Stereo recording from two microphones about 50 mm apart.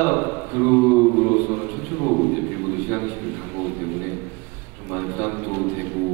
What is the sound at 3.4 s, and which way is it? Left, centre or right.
Speech, left.